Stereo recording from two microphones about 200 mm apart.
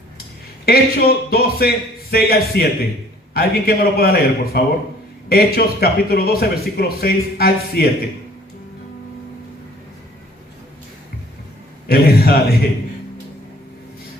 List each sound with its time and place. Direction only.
0.6 s speech: 50° left (ahead or behind)
11.9 s speech: 50° left (ahead or behind)